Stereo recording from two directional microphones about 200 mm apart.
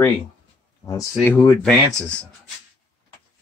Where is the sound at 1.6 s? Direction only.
Centre (ahead or behind).